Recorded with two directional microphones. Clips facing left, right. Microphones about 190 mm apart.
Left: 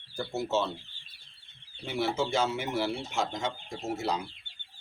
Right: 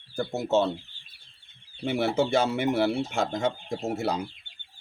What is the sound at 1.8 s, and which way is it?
Speech, 55° right (ahead or behind).